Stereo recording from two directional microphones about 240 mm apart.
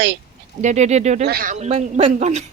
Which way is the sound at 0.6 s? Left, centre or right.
Right.